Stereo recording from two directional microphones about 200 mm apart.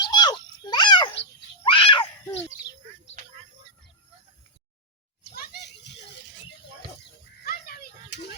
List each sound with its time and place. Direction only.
0.0 s a sound: 20° left (ahead or behind)
1.6 s screaming: 25° left (ahead or behind)
5.3 s children playing: 55° left (ahead or behind)
7.4 s children playing: 50° left (ahead or behind)